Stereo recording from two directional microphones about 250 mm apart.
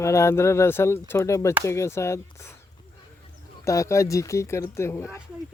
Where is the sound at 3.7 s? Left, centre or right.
Centre.